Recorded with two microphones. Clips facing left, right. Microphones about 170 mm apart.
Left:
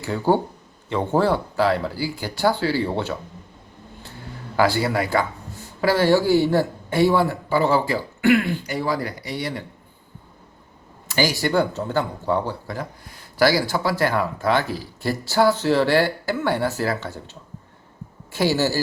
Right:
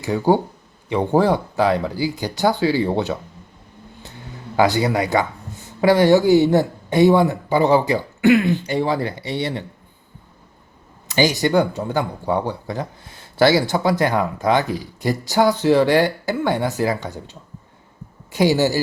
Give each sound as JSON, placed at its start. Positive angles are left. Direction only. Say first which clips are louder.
{"t": 0.0, "sound": "speech", "louder": "right 3 dB", "side_deg": -15}
{"t": 4.5, "sound": "speech", "louder": "right 3 dB", "side_deg": -20}
{"t": 11.1, "sound": "speech", "louder": "right 4 dB", "side_deg": -20}